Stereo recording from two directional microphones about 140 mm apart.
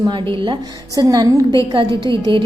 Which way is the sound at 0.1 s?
35° right (ahead or behind).